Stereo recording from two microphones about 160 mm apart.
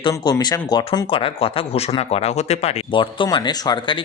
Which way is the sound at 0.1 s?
25° left (ahead or behind).